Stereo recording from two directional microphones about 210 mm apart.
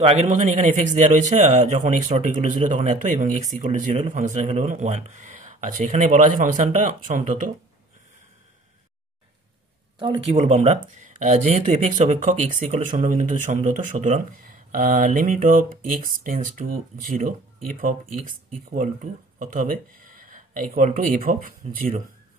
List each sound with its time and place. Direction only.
0.0 s speech: 30° right (ahead or behind)
9.9 s speech: 25° right (ahead or behind)